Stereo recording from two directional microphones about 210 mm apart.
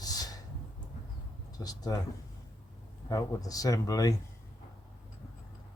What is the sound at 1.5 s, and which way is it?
Speech, 20° left (ahead or behind).